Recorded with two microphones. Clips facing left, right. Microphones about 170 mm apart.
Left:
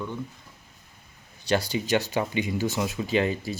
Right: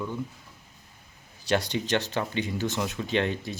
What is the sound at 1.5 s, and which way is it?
Speech, centre (ahead or behind).